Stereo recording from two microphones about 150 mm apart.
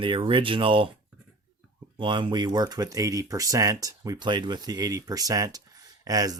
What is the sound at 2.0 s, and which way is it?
Speech, 30° right (ahead or behind).